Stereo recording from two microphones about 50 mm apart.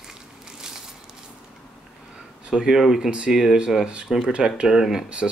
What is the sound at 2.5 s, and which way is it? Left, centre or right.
Speech, centre.